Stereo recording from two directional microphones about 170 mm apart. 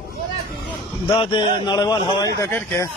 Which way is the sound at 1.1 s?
30° left (ahead or behind).